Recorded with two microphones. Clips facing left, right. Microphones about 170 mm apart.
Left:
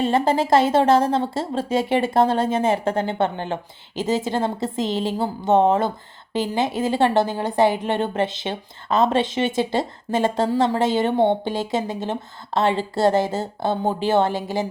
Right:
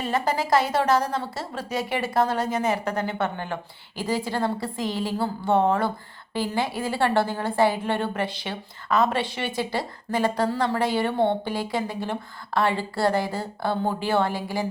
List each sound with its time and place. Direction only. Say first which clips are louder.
0.0 s speech: left 6 dB; 25° left (ahead or behind)